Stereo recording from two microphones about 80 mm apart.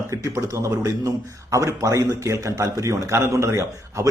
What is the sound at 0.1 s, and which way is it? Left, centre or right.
A man's voice, right.